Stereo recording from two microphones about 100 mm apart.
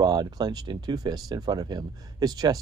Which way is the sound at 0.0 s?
40° right (ahead or behind).